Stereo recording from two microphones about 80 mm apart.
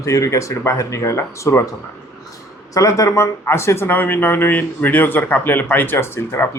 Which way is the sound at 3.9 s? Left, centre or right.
Left.